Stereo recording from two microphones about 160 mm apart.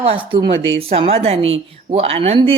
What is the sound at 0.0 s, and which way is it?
Speech, 35° right (ahead or behind).